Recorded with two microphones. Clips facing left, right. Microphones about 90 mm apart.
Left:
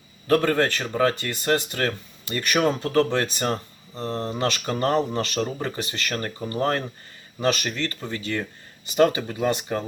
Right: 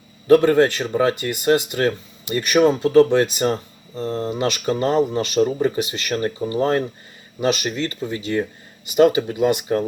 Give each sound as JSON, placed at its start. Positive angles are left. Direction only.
{"t": 0.3, "sound": "speech", "side_deg": -20}